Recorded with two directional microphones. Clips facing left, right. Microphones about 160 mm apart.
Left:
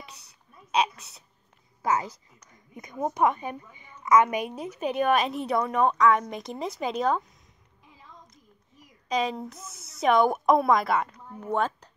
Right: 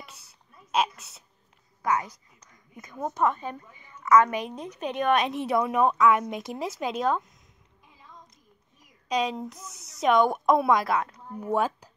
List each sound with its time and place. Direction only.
0.0 s whispering: centre (ahead or behind)
1.8 s a woman's voice: 25° left (ahead or behind); by 7.3 s centre (ahead or behind)
9.1 s a woman's voice: centre (ahead or behind)
11.3 s speech: 10° right (ahead or behind)